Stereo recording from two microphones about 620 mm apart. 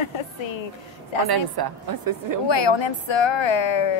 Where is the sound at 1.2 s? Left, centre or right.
Right.